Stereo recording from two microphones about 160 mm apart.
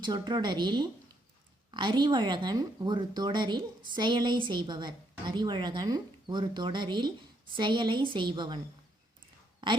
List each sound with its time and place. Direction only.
0.0 s speech: 30° right (ahead or behind)